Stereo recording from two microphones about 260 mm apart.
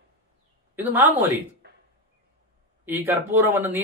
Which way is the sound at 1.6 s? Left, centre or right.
Right.